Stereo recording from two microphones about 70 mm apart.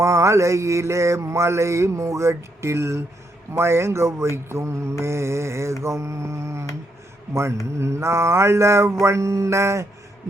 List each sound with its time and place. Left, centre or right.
0.0 s mantra: right
7.8 s mantra: right